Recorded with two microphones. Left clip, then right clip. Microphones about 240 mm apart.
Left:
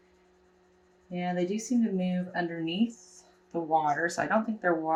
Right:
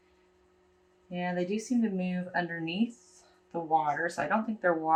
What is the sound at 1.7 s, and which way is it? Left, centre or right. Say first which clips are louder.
Speech: left 2 dB; right.